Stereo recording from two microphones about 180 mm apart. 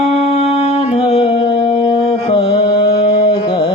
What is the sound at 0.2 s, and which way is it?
Music, 35° left (ahead or behind).